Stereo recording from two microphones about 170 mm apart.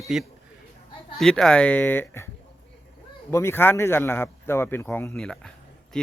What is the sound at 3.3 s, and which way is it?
Speech, 15° left (ahead or behind).